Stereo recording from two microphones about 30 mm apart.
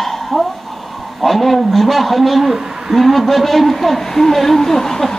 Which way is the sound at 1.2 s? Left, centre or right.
Centre.